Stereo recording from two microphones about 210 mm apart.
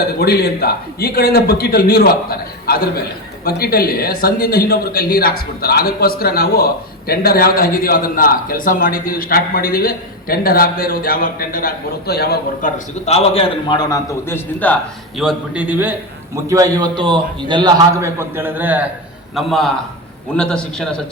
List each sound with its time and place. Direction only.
0.2 s speech: 45° left (ahead or behind)
13.1 s a man's voice: 30° left (ahead or behind); by 14.8 s 10° left (ahead or behind)
15.2 s a man's voice: 5° right (ahead or behind)